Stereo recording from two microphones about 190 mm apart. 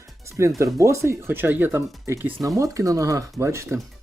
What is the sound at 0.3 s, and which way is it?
Speech, 15° right (ahead or behind).